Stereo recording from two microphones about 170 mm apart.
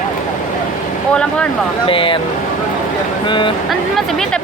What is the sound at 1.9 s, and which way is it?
Speech, 30° left (ahead or behind).